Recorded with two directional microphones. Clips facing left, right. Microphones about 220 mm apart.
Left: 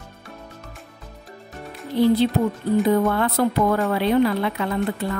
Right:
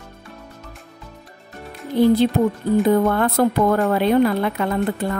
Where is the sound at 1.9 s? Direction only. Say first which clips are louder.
Right 2 dB; 50° right (ahead or behind).